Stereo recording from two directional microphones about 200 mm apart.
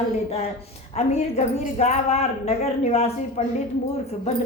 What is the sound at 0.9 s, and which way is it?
A woman's voice, 30° left (ahead or behind).